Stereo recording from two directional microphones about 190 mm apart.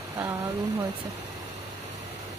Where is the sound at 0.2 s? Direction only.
15° right (ahead or behind).